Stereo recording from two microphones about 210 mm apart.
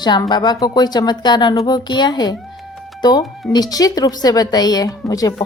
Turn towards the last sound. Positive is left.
turn(degrees=15)  # may be behind; listen again after turning